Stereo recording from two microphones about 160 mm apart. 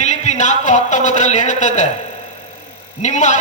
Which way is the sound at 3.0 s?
45° left (ahead or behind).